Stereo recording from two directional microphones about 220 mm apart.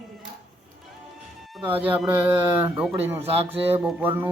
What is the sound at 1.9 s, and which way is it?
Speech, 5° right (ahead or behind).